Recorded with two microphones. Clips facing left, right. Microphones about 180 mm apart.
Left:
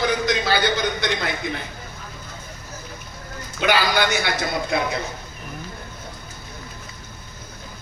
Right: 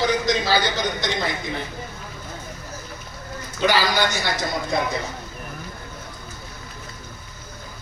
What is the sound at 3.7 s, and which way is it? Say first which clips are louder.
Speech: left 1 dB; 60° left (ahead or behind).